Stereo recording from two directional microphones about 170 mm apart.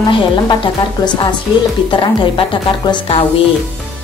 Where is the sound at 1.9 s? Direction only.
30° left (ahead or behind).